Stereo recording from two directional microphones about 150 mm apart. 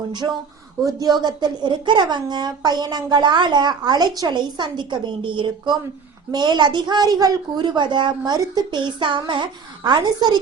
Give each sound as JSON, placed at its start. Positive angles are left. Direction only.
{"t": 0.9, "sound": "a woman's voice", "side_deg": -25}